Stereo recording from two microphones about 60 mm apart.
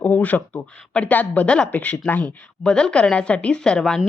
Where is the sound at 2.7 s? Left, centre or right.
Centre.